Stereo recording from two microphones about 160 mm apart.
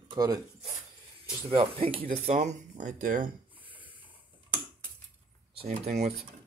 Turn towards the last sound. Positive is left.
turn(degrees=-40)  # may be behind; listen again after turning